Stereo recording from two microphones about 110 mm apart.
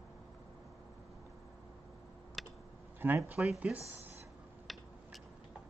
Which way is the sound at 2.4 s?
Centre (ahead or behind).